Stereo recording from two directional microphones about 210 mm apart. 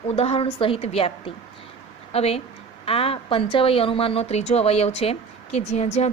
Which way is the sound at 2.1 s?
30° left (ahead or behind).